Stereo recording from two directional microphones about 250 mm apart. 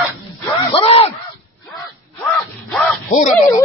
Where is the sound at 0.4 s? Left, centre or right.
Centre.